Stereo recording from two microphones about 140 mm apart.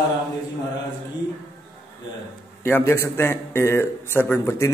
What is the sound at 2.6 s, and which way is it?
A man's voice, 15° left (ahead or behind).